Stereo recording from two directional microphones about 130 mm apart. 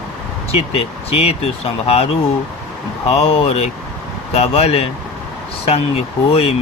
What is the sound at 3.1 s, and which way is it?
Speech, 50° left (ahead or behind).